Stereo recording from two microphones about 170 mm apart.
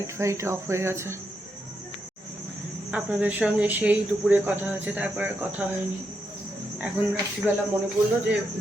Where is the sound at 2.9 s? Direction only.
5° right (ahead or behind).